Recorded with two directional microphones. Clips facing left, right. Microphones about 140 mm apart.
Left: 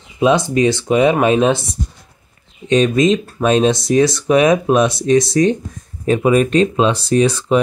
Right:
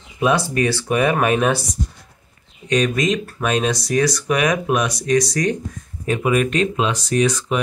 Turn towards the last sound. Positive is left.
turn(degrees=30)  # may be behind; listen again after turning